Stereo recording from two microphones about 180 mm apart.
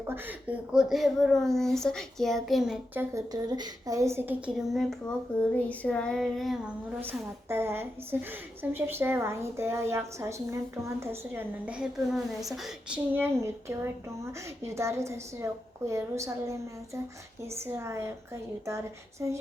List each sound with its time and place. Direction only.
0.1 s a child's voice: 10° right (ahead or behind)
7.0 s a woman's voice: 10° right (ahead or behind)